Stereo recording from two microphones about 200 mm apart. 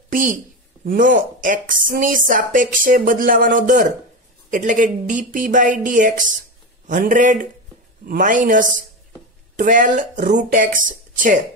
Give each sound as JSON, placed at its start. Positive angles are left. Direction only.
{"t": 0.1, "sound": "a woman's voice", "side_deg": -45}